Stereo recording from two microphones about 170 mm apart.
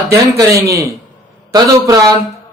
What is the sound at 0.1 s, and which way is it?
Speech, 15° right (ahead or behind).